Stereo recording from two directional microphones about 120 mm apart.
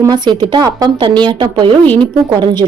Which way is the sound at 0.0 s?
35° right (ahead or behind).